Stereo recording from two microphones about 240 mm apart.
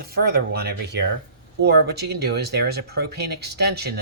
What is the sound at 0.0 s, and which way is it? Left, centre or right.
Speech, right.